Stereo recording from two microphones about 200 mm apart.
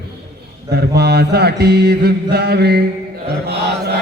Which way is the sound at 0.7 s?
55° right (ahead or behind).